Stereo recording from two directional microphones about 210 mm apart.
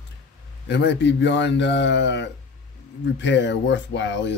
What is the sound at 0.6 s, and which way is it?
Speech, 55° left (ahead or behind).